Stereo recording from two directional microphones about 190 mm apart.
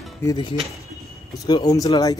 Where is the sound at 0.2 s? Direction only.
20° left (ahead or behind).